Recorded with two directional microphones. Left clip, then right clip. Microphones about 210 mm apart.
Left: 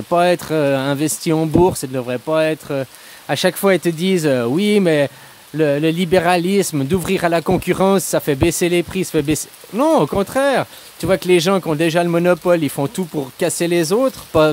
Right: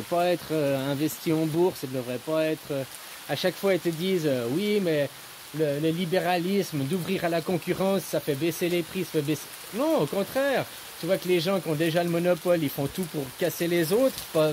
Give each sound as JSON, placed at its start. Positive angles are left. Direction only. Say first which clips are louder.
{"t": 0.1, "sound": "speech", "louder": "left 10 dB", "side_deg": 40}